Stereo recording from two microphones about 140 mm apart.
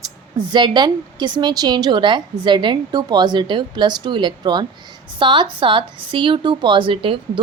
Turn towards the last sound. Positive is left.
turn(degrees=-40)  # may be behind; listen again after turning